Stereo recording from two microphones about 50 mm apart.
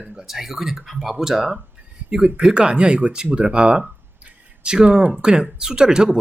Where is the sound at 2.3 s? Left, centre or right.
Centre.